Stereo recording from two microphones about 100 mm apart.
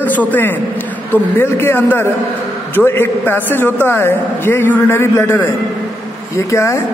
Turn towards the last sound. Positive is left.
turn(degrees=30)  # may be behind; listen again after turning